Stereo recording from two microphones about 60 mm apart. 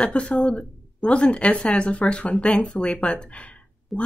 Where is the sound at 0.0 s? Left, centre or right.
Centre.